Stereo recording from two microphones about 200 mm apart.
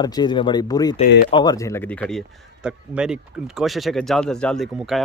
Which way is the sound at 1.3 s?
20° left (ahead or behind).